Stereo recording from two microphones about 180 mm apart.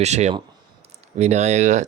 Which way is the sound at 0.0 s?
40° right (ahead or behind).